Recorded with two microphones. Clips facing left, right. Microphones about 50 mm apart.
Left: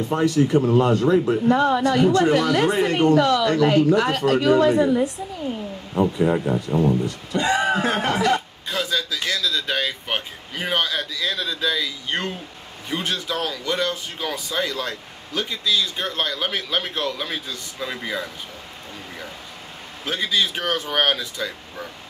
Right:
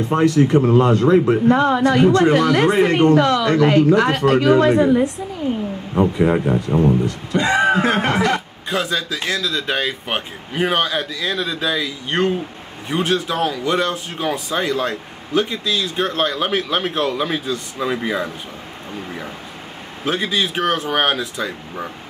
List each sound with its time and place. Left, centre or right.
0.1 s speech: right
6.1 s speech: right
7.3 s speech: right
8.8 s speech: right
20.1 s speech: right